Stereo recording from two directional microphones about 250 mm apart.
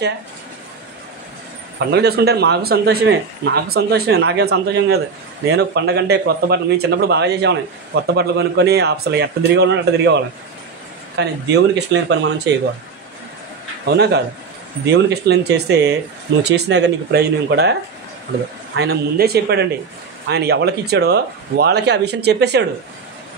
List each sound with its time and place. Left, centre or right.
1.9 s speech: right
13.8 s speech: right
18.8 s speech: right